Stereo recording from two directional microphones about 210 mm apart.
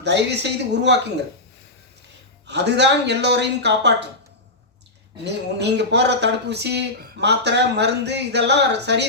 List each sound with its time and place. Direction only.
0.0 s speech: 55° right (ahead or behind)
2.5 s speech: 55° right (ahead or behind)
5.2 s speech: 55° right (ahead or behind)